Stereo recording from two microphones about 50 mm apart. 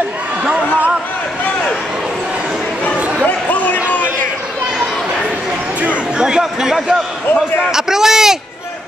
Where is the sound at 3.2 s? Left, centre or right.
Left.